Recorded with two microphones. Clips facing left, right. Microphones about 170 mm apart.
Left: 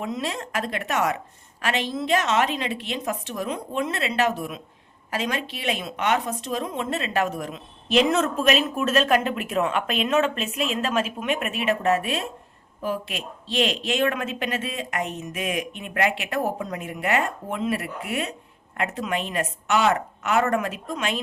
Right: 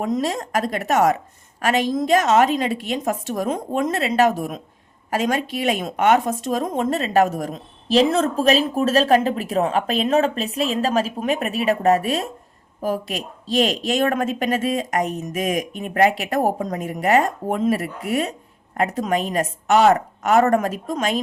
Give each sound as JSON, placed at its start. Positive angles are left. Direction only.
{"t": 0.0, "sound": "a woman's voice", "side_deg": -45}